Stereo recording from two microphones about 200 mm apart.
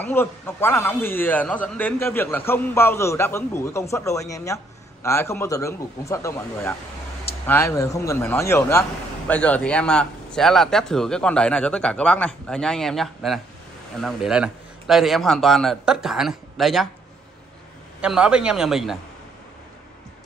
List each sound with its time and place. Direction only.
0.0 s a man's voice: 10° left (ahead or behind)
18.0 s a man's voice: 5° right (ahead or behind)